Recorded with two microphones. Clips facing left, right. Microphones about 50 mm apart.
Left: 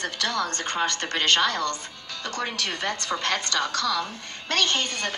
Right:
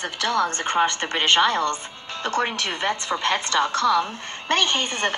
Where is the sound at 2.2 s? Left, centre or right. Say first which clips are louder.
Right 6 dB; right; by 3.5 s centre.